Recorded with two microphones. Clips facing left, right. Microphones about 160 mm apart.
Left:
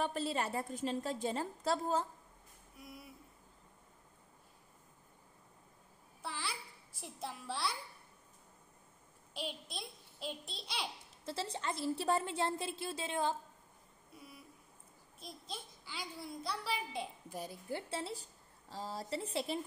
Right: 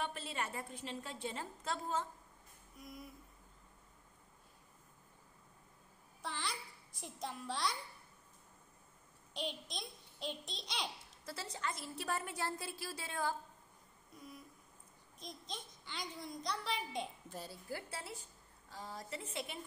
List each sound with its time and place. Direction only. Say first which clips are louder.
0.0 s a woman's voice: left 6 dB; 35° left (ahead or behind)
2.8 s a child's voice: right 1 dB; 5° left (ahead or behind)
6.2 s a child's voice: even; 5° left (ahead or behind)
9.3 s a child's voice: even; 5° left (ahead or behind)
11.2 s a woman's voice: left 4 dB; 30° left (ahead or behind)
14.1 s a sound: right 2 dB; 5° left (ahead or behind)
15.1 s a child's voice: left 1 dB; 5° left (ahead or behind)
17.4 s a woman's voice: left 4 dB; 20° left (ahead or behind)